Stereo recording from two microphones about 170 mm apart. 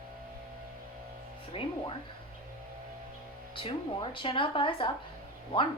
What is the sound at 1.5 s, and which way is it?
Speech, 35° left (ahead or behind).